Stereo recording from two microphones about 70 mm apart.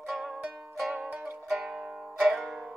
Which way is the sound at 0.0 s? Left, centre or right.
Centre.